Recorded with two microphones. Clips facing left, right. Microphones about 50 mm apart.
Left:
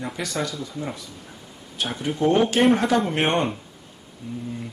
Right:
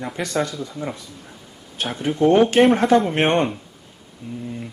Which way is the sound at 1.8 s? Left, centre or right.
Right.